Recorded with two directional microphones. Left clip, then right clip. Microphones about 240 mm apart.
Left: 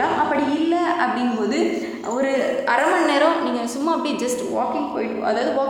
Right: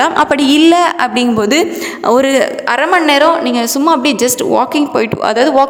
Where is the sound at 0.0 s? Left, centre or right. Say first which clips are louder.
Right 9 dB; right.